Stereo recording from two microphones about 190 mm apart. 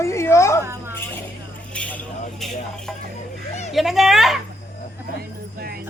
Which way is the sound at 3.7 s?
Centre (ahead or behind).